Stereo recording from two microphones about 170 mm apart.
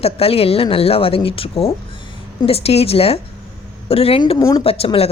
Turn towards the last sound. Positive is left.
turn(degrees=35)  # may be behind; listen again after turning